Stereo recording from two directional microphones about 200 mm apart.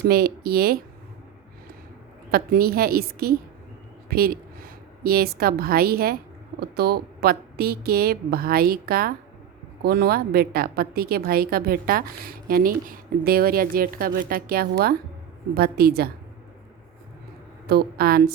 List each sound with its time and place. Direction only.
0.0 s a woman's voice: 50° right (ahead or behind)
2.3 s a woman's voice: 50° right (ahead or behind)
17.7 s a woman's voice: 50° right (ahead or behind)